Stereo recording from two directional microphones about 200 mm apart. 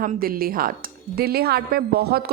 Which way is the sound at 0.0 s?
45° right (ahead or behind).